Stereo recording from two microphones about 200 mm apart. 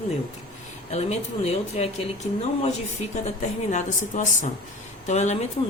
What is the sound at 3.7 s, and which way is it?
Speech, 40° left (ahead or behind).